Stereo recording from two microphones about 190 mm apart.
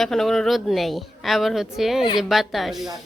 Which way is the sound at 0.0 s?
Centre (ahead or behind).